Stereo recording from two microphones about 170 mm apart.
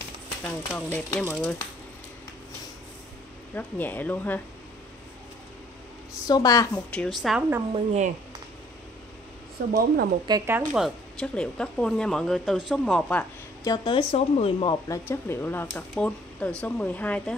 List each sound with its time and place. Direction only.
0.4 s speech: 10° left (ahead or behind)
3.5 s speech: 10° left (ahead or behind)
6.2 s speech: 20° left (ahead or behind)
6.9 s speech: 5° left (ahead or behind)
7.7 s speech: 40° right (ahead or behind)
9.6 s speech: 55° right (ahead or behind)
10.2 s speech: 25° right (ahead or behind)
10.7 s speech: centre (ahead or behind)
13.7 s speech: 30° left (ahead or behind)
14.9 s speech: 15° left (ahead or behind)